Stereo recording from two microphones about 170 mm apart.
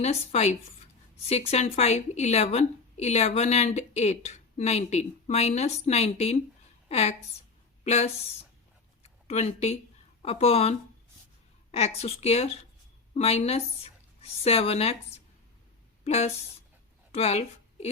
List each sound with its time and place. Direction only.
0.0 s a woman's voice: 40° left (ahead or behind)
16.0 s a woman's voice: 40° left (ahead or behind)
17.1 s a sound: 35° left (ahead or behind)